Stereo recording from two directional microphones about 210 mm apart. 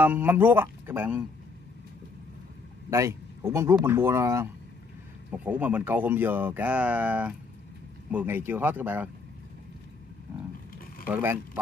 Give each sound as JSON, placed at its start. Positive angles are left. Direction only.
{"t": 0.0, "sound": "speech", "side_deg": -10}
{"t": 2.9, "sound": "speech", "side_deg": -15}
{"t": 11.1, "sound": "speech", "side_deg": -10}